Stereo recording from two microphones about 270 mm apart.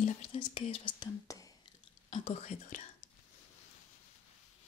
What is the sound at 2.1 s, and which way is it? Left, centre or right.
Speech, left.